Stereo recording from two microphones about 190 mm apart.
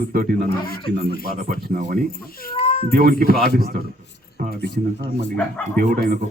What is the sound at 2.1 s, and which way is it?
Speech, 50° left (ahead or behind).